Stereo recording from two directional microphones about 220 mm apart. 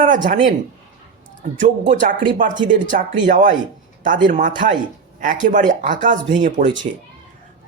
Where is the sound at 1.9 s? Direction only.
35° right (ahead or behind).